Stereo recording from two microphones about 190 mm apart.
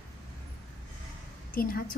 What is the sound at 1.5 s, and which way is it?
Speech, 50° left (ahead or behind).